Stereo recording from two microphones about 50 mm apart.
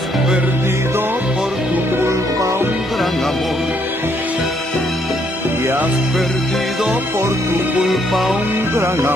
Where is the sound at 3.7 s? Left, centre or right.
Right.